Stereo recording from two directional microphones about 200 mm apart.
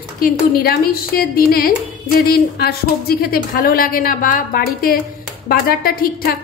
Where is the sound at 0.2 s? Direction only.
45° left (ahead or behind).